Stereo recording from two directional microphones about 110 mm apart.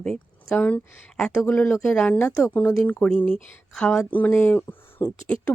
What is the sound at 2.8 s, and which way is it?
A woman's voice, 10° left (ahead or behind).